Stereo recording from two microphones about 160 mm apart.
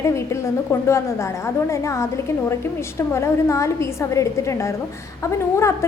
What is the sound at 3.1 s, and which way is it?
A woman's voice, 15° left (ahead or behind).